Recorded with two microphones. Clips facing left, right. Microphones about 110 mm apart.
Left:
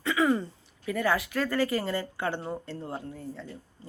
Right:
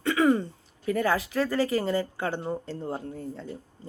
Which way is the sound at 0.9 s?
35° right (ahead or behind).